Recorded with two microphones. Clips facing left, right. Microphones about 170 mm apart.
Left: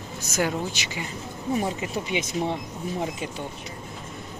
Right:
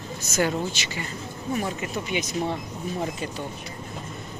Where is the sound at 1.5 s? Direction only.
25° left (ahead or behind).